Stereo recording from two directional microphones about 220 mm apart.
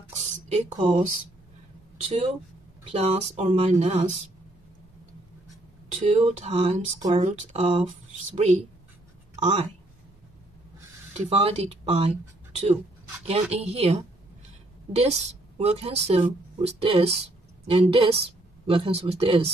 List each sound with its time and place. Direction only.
0.1 s a sound: 30° right (ahead or behind)
2.0 s speech: 30° right (ahead or behind)
5.9 s speech: 30° right (ahead or behind)
9.3 s a sound: 30° right (ahead or behind)
11.1 s speech: 30° right (ahead or behind)
13.3 s a woman's voice: 30° right (ahead or behind)